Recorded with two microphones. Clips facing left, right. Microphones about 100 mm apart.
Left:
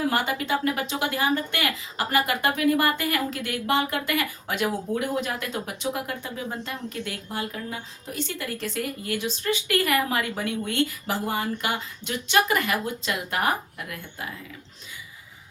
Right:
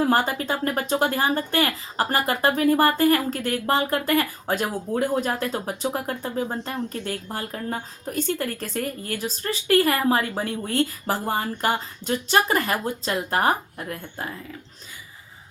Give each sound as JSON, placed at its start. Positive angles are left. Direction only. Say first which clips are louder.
{"t": 0.0, "sound": "a woman's voice", "louder": "right 4 dB", "side_deg": -40}